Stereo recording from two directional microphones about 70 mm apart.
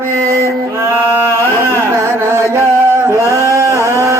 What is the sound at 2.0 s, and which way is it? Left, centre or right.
Carnatic music, right.